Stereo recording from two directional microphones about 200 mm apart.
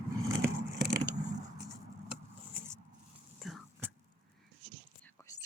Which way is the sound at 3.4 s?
Centre (ahead or behind).